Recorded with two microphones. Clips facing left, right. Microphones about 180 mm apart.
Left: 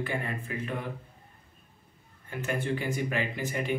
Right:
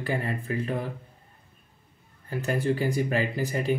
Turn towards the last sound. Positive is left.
turn(degrees=-35)  # may be behind; listen again after turning